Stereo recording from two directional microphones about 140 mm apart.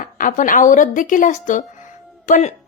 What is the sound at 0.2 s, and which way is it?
A woman's voice, 70° left (ahead or behind).